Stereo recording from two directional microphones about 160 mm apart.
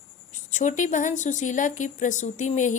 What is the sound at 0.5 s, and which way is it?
Speech, 50° left (ahead or behind).